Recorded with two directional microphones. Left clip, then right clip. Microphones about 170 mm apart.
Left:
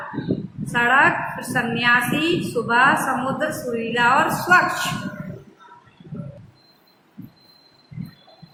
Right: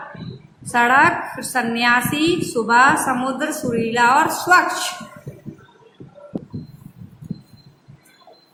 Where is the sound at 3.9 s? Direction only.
40° right (ahead or behind).